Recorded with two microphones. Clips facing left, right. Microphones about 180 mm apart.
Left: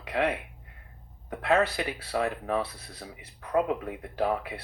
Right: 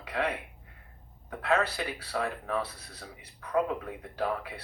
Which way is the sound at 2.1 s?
20° left (ahead or behind).